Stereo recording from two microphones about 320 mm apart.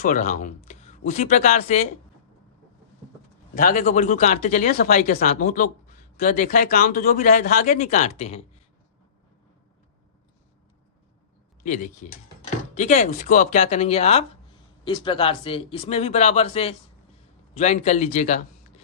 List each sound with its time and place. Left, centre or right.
0.0 s speech: left
3.5 s speech: left
11.6 s speech: left